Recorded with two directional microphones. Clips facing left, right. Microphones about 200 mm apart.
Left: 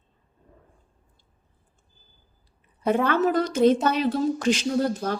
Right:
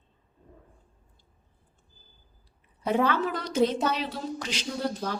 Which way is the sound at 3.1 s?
45° left (ahead or behind).